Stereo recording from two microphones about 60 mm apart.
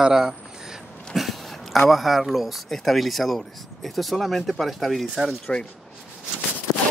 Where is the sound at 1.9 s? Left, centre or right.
Centre.